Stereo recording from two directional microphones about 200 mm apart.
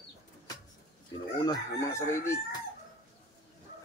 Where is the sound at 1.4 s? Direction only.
15° left (ahead or behind).